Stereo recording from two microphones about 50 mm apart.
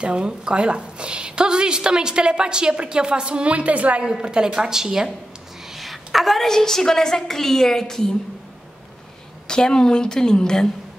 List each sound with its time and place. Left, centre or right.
0.0 s a woman's voice: centre
4.0 s a woman's voice: centre
9.5 s a woman's voice: centre